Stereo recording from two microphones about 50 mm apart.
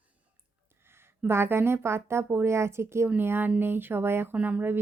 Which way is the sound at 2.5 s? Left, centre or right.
Right.